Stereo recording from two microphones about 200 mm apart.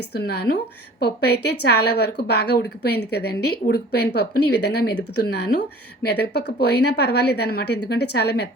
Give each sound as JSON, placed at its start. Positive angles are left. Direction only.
{"t": 0.1, "sound": "a woman's voice", "side_deg": 55}